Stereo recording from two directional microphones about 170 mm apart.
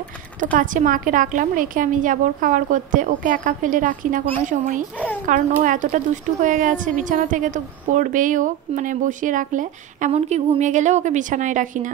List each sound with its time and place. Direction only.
0.4 s a woman's voice: 50° right (ahead or behind)